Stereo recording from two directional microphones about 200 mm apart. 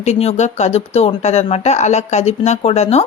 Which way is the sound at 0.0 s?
35° left (ahead or behind).